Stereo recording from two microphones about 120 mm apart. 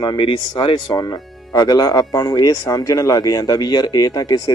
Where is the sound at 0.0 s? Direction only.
40° left (ahead or behind).